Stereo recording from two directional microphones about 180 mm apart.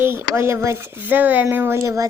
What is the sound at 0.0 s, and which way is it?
Speech, 15° right (ahead or behind).